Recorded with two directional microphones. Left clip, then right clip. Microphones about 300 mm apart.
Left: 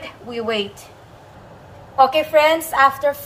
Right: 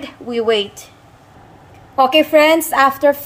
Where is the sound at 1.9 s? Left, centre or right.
Right.